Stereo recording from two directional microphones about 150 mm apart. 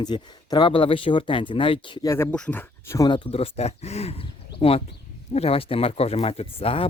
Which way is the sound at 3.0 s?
30° left (ahead or behind).